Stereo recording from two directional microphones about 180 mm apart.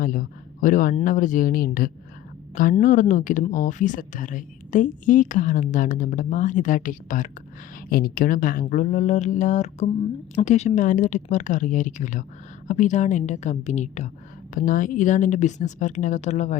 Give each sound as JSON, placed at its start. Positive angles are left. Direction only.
{"t": 0.0, "sound": "a woman's voice", "side_deg": 45}